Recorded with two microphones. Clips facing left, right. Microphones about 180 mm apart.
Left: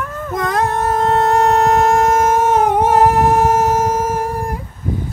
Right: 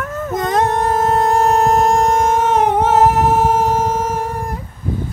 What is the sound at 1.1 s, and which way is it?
Humming, centre (ahead or behind).